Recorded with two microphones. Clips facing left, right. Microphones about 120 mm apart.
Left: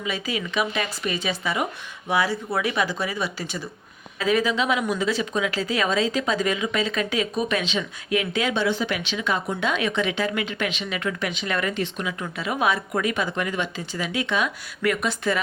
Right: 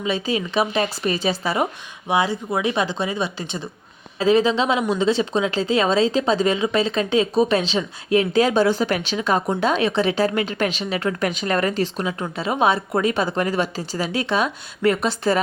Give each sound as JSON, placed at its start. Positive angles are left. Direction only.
{"t": 0.0, "sound": "speech", "side_deg": -30}
{"t": 2.0, "sound": "speech", "side_deg": -20}